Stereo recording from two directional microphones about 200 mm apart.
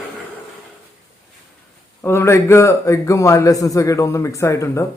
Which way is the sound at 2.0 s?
10° left (ahead or behind).